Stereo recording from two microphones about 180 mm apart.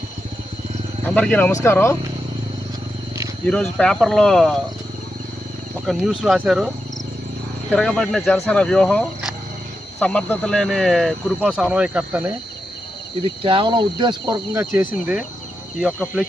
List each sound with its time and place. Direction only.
1.0 s speech: 10° left (ahead or behind)
3.4 s speech: 5° left (ahead or behind)
5.8 s speech: centre (ahead or behind)
7.7 s speech: centre (ahead or behind)
13.2 s speech: 30° right (ahead or behind); by 15.2 s 10° right (ahead or behind)